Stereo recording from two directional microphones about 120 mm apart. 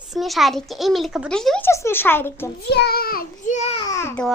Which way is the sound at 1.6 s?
20° left (ahead or behind).